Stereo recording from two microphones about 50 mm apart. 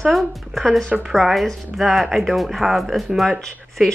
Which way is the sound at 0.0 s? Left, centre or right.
Centre.